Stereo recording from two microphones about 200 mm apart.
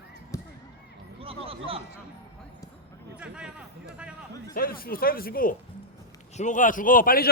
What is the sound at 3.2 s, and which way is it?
Speech, 5° right (ahead or behind).